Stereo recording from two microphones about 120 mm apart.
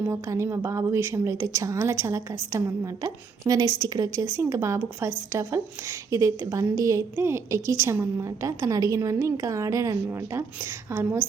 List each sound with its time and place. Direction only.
0.1 s a woman's voice: 25° right (ahead or behind)